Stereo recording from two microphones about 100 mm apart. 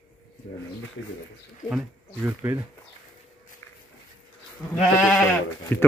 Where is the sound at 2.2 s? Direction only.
25° right (ahead or behind).